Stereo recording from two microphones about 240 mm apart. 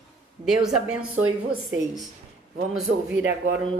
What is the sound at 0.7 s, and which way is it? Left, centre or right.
Speech, right.